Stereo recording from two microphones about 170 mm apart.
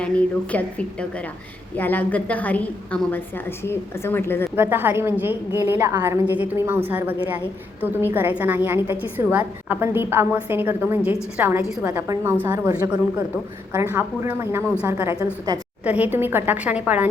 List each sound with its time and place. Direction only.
0.5 s a woman's voice: 5° left (ahead or behind)
4.5 s a woman's voice: 15° right (ahead or behind)